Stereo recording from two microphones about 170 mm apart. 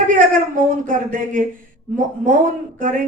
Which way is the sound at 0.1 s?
50° right (ahead or behind).